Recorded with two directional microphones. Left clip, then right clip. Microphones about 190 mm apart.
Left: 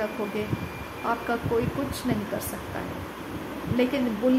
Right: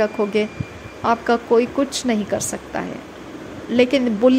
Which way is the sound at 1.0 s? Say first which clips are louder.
Right 10 dB; 45° right (ahead or behind).